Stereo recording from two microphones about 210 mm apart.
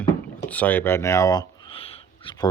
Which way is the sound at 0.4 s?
5° left (ahead or behind).